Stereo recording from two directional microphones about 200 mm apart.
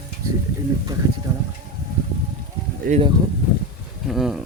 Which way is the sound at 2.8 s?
45° right (ahead or behind).